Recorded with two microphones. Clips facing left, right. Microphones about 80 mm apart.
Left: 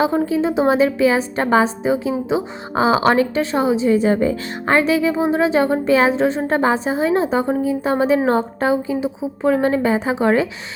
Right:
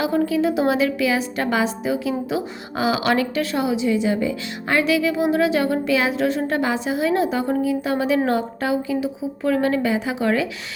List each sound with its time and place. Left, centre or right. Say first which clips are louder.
0.0 s a woman's voice: left 2 dB; left